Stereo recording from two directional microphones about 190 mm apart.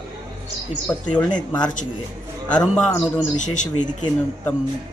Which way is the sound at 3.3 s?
40° left (ahead or behind).